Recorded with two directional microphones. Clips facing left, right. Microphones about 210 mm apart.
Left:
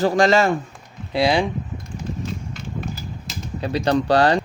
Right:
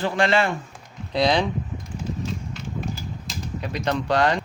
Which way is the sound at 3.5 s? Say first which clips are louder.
Left 6 dB; 30° left (ahead or behind).